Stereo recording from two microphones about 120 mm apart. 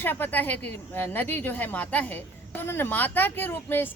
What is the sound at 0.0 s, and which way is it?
A woman's voice, 15° left (ahead or behind).